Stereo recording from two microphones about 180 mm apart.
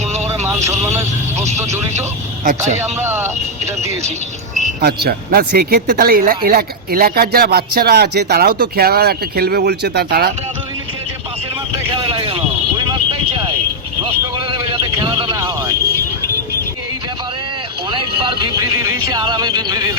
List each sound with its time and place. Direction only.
0.3 s speech: 15° right (ahead or behind)
3.0 s speech: 10° right (ahead or behind)
4.8 s speech: 65° right (ahead or behind)
11.9 s a sound: 30° right (ahead or behind)
14.5 s vehicle: 25° right (ahead or behind)
17.9 s a sound: 30° right (ahead or behind)